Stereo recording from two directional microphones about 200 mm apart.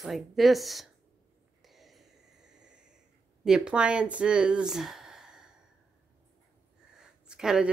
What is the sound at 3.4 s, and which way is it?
Speech, 5° right (ahead or behind).